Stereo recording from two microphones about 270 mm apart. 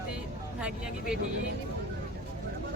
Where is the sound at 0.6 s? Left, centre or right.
Centre.